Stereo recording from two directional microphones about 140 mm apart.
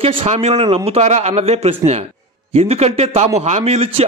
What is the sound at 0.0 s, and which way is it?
A man's voice, 45° right (ahead or behind).